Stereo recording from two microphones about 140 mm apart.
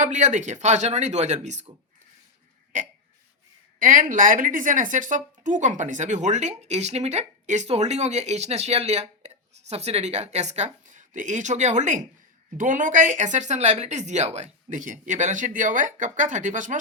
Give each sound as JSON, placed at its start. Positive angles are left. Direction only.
{"t": 0.0, "sound": "speech", "side_deg": -60}
{"t": 2.7, "sound": "speech", "side_deg": -60}